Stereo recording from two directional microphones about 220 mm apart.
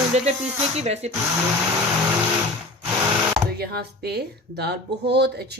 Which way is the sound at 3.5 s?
45° right (ahead or behind).